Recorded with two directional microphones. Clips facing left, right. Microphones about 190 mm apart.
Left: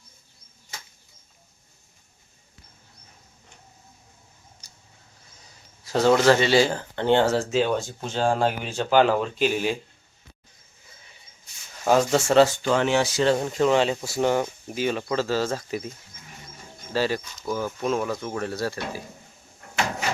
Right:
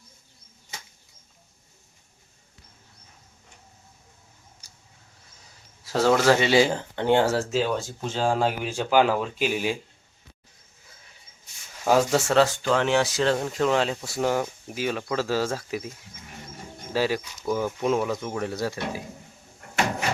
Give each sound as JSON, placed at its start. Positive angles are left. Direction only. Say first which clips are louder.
{"t": 5.8, "sound": "speech", "louder": "left 2 dB", "side_deg": -5}
{"t": 11.9, "sound": "speech", "louder": "left 1 dB", "side_deg": -5}
{"t": 16.9, "sound": "speech", "louder": "even", "side_deg": -10}